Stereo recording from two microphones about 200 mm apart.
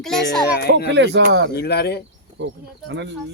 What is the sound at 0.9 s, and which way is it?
Speech, 60° right (ahead or behind).